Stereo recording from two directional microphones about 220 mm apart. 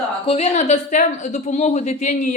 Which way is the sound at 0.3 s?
30° left (ahead or behind).